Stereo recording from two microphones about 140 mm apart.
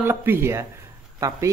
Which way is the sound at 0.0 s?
15° right (ahead or behind).